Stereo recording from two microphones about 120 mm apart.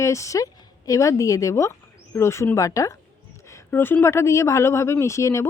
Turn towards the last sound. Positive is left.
turn(degrees=25)  # may be behind; listen again after turning